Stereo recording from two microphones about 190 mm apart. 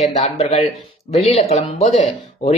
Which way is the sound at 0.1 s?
35° left (ahead or behind).